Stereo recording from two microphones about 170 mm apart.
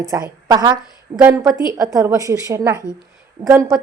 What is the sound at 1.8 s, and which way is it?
A woman's voice, 20° right (ahead or behind).